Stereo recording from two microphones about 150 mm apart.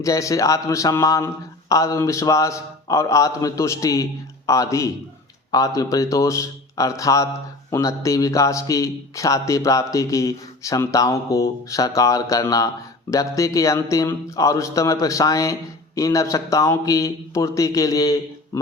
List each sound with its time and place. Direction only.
0.0 s a man's voice: 20° left (ahead or behind)